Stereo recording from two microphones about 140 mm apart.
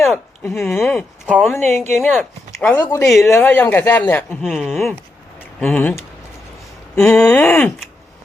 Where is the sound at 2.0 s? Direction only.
10° left (ahead or behind).